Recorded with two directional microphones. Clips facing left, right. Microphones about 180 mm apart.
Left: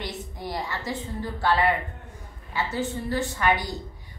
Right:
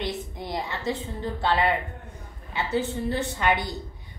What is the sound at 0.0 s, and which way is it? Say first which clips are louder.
A woman's voice: right 3 dB; 20° right (ahead or behind).